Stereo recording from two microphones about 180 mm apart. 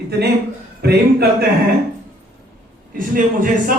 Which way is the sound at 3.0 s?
50° right (ahead or behind).